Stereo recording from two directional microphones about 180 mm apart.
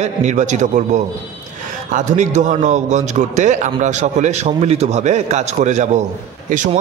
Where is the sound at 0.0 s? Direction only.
40° right (ahead or behind).